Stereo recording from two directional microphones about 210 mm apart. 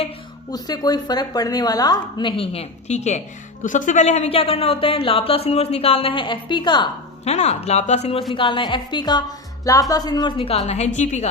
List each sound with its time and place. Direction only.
0.5 s speech: 20° left (ahead or behind); by 11.3 s 35° left (ahead or behind)